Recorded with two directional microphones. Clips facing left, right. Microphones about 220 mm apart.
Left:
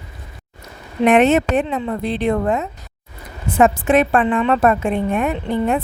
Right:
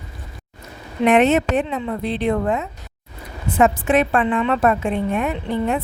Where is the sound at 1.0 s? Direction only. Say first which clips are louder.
Left 2 dB; 50° left (ahead or behind).